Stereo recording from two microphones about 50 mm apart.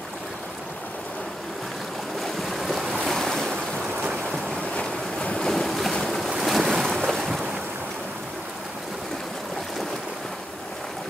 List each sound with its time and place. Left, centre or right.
2.1 s waves: centre
4.0 s boat: centre
4.7 s boat: left
5.4 s boat: centre
6.3 s waves: centre